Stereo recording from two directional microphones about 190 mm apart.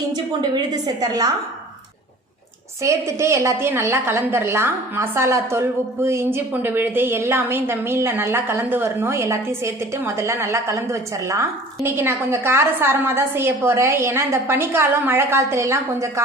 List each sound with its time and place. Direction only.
0.5 s a woman's voice: 20° right (ahead or behind)
2.8 s a woman's voice: 15° right (ahead or behind)